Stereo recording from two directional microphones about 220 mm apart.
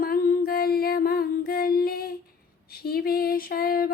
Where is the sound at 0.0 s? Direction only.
40° left (ahead or behind).